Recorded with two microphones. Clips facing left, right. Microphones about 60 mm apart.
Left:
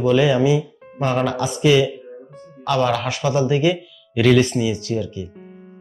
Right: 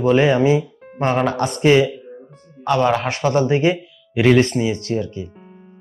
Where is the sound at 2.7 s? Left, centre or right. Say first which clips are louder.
Right 2 dB; right.